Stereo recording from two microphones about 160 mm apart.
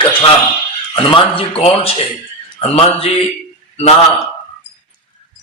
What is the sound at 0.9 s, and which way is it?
Speech, 35° left (ahead or behind).